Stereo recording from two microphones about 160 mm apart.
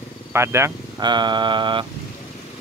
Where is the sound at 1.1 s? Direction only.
30° right (ahead or behind).